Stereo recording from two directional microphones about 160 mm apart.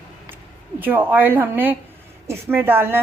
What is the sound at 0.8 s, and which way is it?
A woman's voice, 10° right (ahead or behind).